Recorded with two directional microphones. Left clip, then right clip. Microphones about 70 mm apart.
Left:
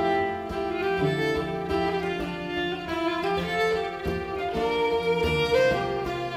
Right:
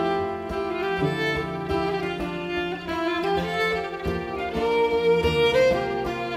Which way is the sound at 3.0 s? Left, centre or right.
Left.